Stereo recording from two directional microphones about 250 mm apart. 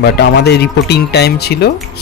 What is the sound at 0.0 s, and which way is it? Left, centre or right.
Speech, left.